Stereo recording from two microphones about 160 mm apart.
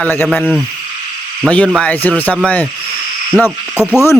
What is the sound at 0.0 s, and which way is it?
Speech, 15° left (ahead or behind).